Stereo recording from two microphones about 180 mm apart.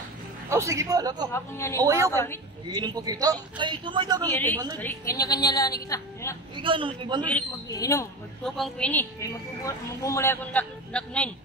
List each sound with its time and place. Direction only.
0.5 s a man's voice: 15° right (ahead or behind)
1.3 s a man's voice: 15° left (ahead or behind)
1.8 s a woman's voice: 20° right (ahead or behind)
4.3 s a man's voice: 10° left (ahead or behind)
6.5 s a man's voice: 30° right (ahead or behind)
7.7 s a man's voice: 20° left (ahead or behind)
8.5 s a woman's voice: centre (ahead or behind)
9.2 s a man's voice: 15° left (ahead or behind)